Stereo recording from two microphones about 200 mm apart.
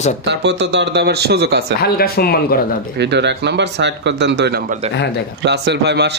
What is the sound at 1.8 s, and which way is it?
Speech, 50° left (ahead or behind).